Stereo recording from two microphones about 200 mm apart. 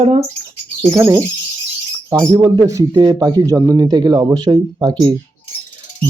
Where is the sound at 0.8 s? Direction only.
15° right (ahead or behind).